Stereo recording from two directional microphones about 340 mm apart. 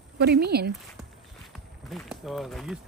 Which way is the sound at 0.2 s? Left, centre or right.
Right.